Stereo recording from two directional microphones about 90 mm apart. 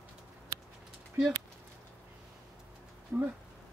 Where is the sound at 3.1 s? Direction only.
20° right (ahead or behind).